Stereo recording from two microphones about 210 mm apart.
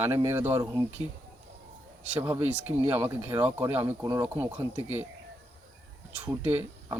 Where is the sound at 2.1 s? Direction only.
10° right (ahead or behind).